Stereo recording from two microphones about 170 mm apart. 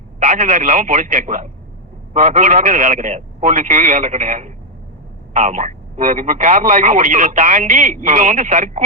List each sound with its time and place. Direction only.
0.2 s speech: 45° right (ahead or behind)